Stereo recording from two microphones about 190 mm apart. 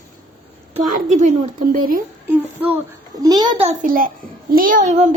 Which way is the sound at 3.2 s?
20° right (ahead or behind).